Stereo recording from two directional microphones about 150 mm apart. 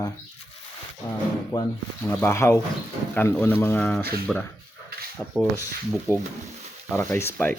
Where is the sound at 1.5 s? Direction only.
25° left (ahead or behind); by 4.4 s centre (ahead or behind).